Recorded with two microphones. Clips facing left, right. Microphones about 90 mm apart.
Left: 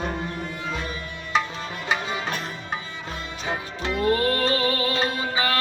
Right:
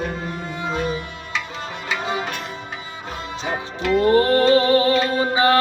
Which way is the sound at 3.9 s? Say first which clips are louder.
Right 7 dB; 35° right (ahead or behind).